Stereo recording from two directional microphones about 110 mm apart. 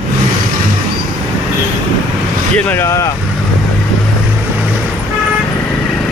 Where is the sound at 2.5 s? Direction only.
20° left (ahead or behind).